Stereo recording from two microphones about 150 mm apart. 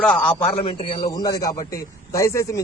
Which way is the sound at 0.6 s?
35° left (ahead or behind).